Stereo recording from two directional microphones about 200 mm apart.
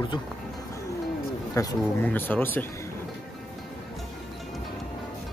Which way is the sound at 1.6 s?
15° left (ahead or behind).